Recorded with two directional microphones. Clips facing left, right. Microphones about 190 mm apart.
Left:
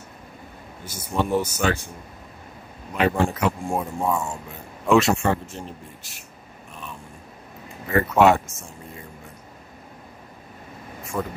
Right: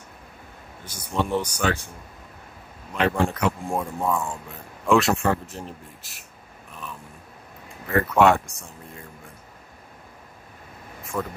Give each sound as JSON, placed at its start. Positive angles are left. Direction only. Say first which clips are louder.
{"t": 0.8, "sound": "speech", "louder": "left 2 dB", "side_deg": 5}
{"t": 2.9, "sound": "speech", "louder": "left 1 dB", "side_deg": 5}
{"t": 7.6, "sound": "speech", "louder": "left 1 dB", "side_deg": 0}
{"t": 11.1, "sound": "speech", "louder": "left 1 dB", "side_deg": 10}